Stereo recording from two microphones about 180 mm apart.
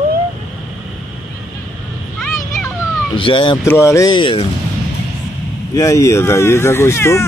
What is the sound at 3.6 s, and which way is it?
Speech, 15° left (ahead or behind).